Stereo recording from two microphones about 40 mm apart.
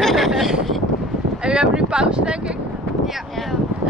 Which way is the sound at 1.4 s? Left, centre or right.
Right.